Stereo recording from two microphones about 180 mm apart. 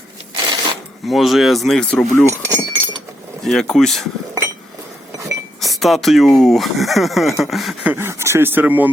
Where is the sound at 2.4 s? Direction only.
20° right (ahead or behind).